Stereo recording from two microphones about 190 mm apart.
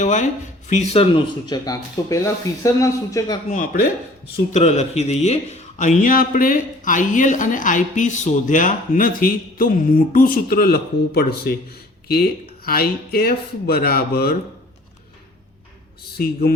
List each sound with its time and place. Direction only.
0.0 s speech: 40° left (ahead or behind)
1.5 s speech: 20° left (ahead or behind)
3.5 s a man's voice: 45° left (ahead or behind)
16.1 s a man's voice: 55° left (ahead or behind)